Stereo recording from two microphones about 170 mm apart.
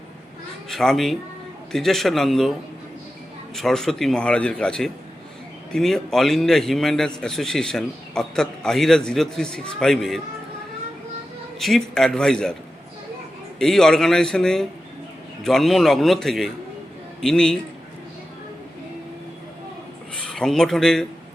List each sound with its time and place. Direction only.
0.7 s a man's voice: centre (ahead or behind)
3.5 s a man's voice: centre (ahead or behind)
11.6 s a man's voice: centre (ahead or behind)
13.6 s a man's voice: 5° left (ahead or behind)
20.1 s speech: 5° left (ahead or behind)